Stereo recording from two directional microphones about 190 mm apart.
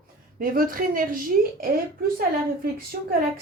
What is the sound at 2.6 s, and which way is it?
Speech, 50° right (ahead or behind).